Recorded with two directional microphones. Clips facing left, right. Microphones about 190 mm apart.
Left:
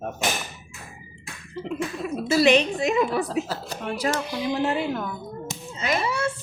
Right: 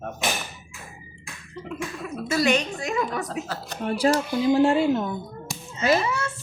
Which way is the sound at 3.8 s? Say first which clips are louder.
Right 5 dB; 30° right (ahead or behind).